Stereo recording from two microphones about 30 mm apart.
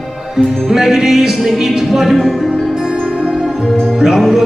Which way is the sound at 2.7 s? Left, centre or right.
Right.